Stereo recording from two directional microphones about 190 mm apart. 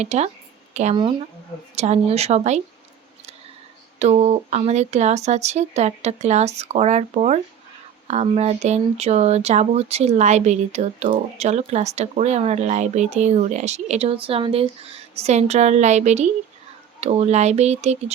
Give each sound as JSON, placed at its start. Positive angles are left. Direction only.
{"t": 0.0, "sound": "speech", "side_deg": -35}
{"t": 4.0, "sound": "speech", "side_deg": -35}